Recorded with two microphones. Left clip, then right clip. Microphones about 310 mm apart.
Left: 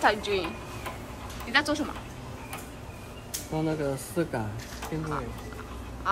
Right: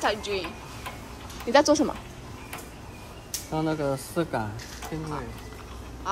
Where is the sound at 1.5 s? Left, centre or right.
Right.